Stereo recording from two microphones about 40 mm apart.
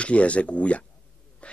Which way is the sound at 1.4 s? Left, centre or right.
Left.